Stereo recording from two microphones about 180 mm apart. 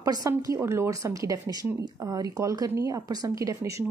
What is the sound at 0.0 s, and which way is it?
Speech, 20° right (ahead or behind).